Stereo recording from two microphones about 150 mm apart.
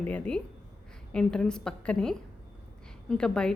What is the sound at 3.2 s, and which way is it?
Speech, 5° left (ahead or behind).